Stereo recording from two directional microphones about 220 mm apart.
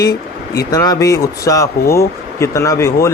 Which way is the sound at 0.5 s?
15° left (ahead or behind).